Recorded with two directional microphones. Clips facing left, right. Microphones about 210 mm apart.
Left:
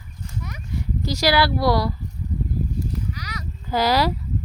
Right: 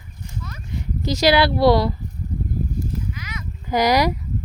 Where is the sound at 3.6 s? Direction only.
15° right (ahead or behind).